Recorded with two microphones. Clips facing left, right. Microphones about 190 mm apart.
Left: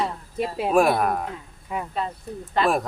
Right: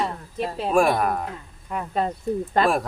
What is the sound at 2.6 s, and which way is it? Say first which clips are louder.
Speech: right 1 dB; 45° right (ahead or behind).